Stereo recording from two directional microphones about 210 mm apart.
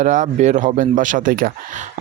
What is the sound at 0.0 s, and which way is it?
Speech, 35° right (ahead or behind).